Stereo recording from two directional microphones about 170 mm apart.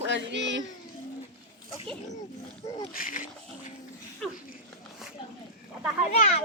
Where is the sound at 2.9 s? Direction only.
55° left (ahead or behind).